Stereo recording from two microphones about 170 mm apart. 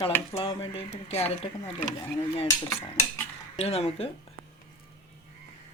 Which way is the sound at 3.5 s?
35° left (ahead or behind).